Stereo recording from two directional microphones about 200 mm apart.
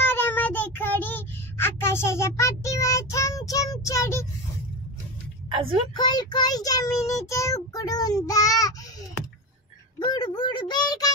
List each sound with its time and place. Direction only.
0.0 s child singing: 10° left (ahead or behind)
5.5 s a woman's voice: 25° right (ahead or behind)
5.9 s child singing: 20° left (ahead or behind)
9.9 s child singing: 20° left (ahead or behind)